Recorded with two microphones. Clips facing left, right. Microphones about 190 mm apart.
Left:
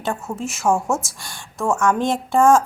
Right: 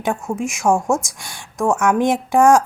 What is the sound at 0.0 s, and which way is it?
A woman's voice, 15° right (ahead or behind).